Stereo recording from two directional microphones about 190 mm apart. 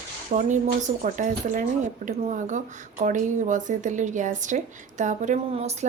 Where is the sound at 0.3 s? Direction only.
40° right (ahead or behind).